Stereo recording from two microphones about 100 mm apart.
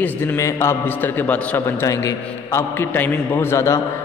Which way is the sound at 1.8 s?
30° left (ahead or behind).